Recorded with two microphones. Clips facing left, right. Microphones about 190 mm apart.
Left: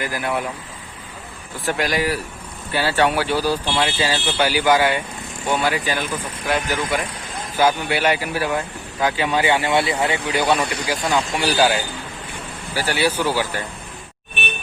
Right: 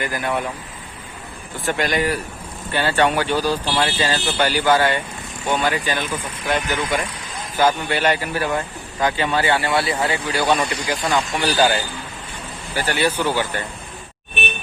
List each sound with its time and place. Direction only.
0.0 s speech: 5° left (ahead or behind)
1.6 s speech: centre (ahead or behind)
7.5 s speech: 10° left (ahead or behind)